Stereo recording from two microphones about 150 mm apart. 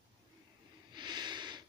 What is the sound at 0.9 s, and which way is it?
Snort, 30° right (ahead or behind).